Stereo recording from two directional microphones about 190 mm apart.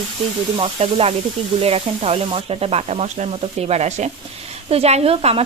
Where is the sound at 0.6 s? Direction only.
30° right (ahead or behind).